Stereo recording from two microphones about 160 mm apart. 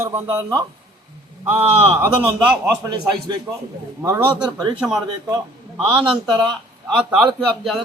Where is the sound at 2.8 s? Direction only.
25° right (ahead or behind).